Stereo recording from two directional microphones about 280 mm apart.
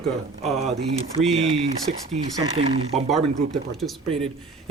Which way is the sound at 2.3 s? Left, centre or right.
Right.